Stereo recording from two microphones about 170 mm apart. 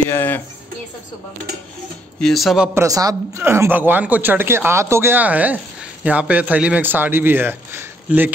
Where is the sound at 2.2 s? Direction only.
Centre (ahead or behind).